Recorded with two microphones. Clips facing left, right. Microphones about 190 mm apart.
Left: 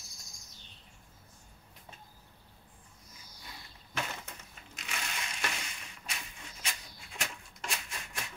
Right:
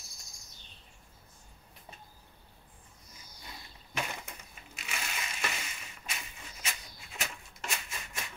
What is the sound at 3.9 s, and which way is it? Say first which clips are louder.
Crushing: right 1 dB; 15° right (ahead or behind).